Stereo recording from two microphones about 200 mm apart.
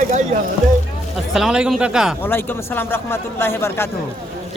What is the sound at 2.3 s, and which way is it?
A man's voice, 10° left (ahead or behind).